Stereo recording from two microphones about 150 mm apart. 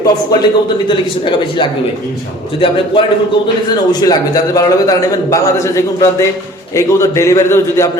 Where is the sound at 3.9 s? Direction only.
25° left (ahead or behind).